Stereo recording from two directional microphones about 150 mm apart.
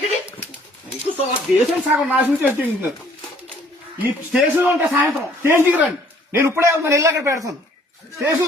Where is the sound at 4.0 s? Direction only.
10° right (ahead or behind).